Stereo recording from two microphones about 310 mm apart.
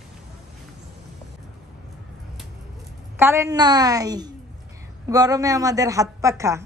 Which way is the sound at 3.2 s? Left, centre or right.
Centre.